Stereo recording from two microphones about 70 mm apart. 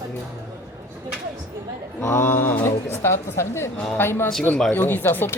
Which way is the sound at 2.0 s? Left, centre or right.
Left.